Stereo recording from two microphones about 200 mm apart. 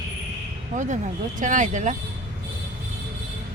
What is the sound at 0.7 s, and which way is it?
Speech, 35° right (ahead or behind).